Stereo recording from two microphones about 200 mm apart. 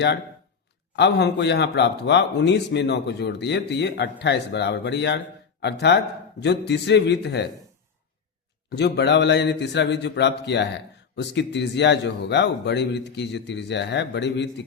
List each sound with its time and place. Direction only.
0.9 s a man's voice: 60° left (ahead or behind)
6.4 s a man's voice: 60° left (ahead or behind)
8.7 s a man's voice: 60° left (ahead or behind)